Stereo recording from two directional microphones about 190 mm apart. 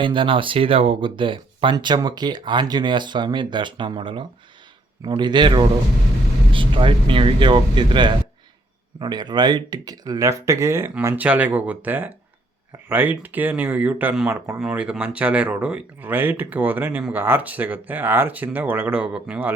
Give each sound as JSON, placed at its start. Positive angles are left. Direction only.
{"t": 0.0, "sound": "speech", "side_deg": -25}